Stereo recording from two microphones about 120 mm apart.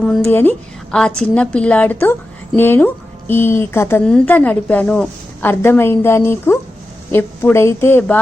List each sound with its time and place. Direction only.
0.3 s a woman's voice: 15° left (ahead or behind)